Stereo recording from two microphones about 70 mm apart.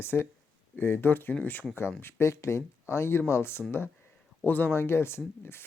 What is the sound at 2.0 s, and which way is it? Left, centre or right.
Speech, left.